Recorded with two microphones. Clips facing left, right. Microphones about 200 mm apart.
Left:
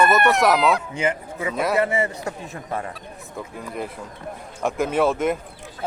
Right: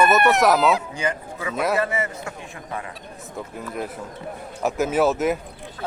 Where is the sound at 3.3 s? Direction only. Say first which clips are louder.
Right 1 dB; centre (ahead or behind).